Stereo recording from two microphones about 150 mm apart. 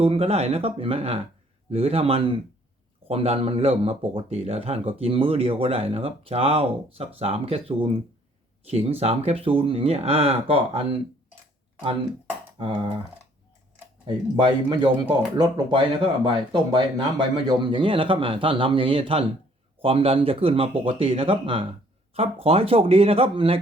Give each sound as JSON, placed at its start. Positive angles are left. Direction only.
{"t": 0.0, "sound": "a man's voice", "side_deg": -40}
{"t": 12.6, "sound": "a man's voice", "side_deg": -35}
{"t": 14.1, "sound": "a man's voice", "side_deg": -30}